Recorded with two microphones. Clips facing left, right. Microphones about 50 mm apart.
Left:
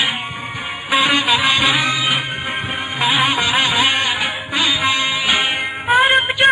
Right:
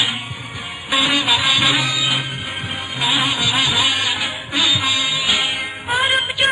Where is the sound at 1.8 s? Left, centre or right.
Left.